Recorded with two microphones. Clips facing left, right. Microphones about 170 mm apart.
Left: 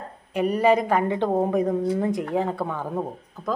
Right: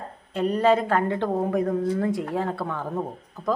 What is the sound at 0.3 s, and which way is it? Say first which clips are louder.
Speech: left 1 dB; 10° left (ahead or behind).